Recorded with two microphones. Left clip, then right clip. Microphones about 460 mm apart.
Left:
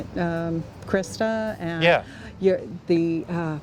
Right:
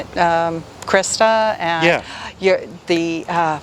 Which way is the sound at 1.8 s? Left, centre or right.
Left.